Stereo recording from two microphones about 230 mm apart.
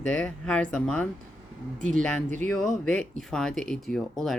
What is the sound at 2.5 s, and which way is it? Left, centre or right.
Speech, centre.